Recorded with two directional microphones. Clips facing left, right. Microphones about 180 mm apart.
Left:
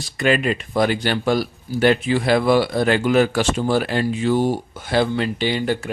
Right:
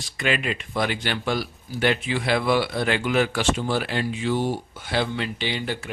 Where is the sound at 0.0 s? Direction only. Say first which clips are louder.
Left 7 dB; 40° left (ahead or behind).